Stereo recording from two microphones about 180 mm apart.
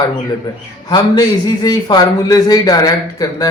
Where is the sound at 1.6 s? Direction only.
20° left (ahead or behind).